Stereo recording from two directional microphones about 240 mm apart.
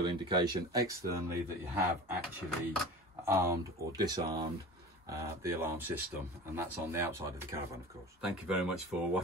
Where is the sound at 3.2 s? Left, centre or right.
Centre.